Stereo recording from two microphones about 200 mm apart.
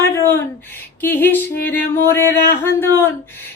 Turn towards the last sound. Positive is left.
turn(degrees=10)  # may be behind; listen again after turning